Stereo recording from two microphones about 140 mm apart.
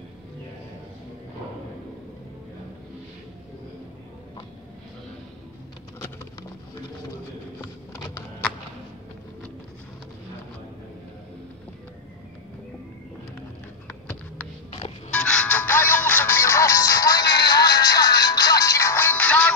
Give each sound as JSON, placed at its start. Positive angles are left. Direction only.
{"t": 15.1, "sound": "music", "side_deg": 5}